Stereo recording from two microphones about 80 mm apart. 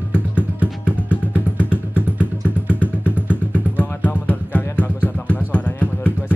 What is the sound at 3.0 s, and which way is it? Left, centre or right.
Vehicle, right.